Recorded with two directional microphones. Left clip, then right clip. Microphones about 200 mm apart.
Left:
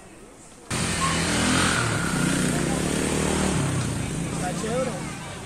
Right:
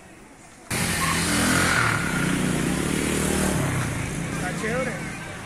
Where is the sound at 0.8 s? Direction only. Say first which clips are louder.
Even; 50° right (ahead or behind).